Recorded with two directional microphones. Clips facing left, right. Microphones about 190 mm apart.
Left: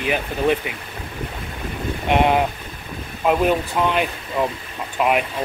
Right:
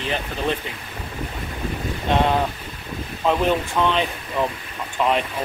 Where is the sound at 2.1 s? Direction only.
15° left (ahead or behind).